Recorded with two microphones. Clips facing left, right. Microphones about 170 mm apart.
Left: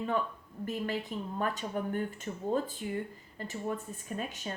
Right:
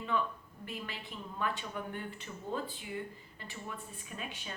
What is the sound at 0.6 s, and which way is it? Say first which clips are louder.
A woman's voice: left 10 dB; 45° left (ahead or behind).